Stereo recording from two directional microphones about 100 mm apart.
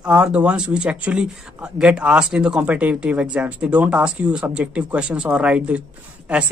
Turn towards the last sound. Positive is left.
turn(degrees=-15)  # may be behind; listen again after turning